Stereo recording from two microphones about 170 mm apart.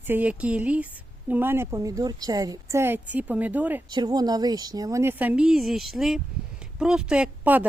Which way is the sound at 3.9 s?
25° right (ahead or behind).